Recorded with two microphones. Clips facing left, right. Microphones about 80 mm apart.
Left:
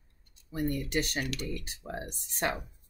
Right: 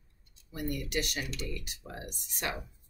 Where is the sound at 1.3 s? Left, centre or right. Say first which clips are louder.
Left 2 dB; left.